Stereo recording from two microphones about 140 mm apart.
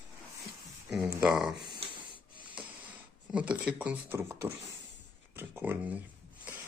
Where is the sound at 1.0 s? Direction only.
20° right (ahead or behind).